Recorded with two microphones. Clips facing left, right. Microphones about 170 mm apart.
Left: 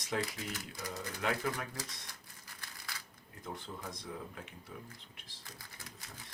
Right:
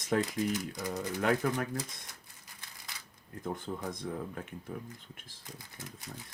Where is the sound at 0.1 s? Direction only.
50° right (ahead or behind).